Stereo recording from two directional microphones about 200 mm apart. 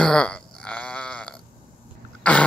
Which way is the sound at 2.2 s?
5° left (ahead or behind).